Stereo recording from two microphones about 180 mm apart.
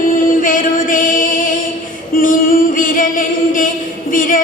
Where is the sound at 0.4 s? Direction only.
50° left (ahead or behind).